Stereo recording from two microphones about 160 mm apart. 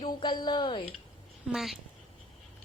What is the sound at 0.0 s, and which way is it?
Speech, 30° left (ahead or behind).